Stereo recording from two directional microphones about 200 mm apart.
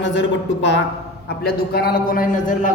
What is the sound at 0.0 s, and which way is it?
Speech, 65° left (ahead or behind).